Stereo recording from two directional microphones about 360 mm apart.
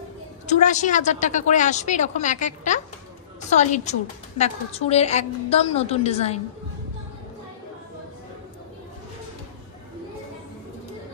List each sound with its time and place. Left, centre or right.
0.5 s a woman's voice: centre